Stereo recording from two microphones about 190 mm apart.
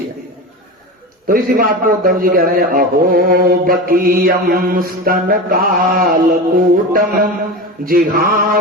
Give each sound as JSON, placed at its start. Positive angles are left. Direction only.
{"t": 1.3, "sound": "a man's voice", "side_deg": -50}